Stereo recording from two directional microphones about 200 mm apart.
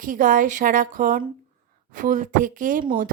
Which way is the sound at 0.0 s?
40° right (ahead or behind).